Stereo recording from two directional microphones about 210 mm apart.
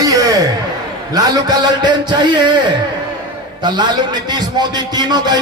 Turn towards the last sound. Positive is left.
turn(degrees=-20)  # may be behind; listen again after turning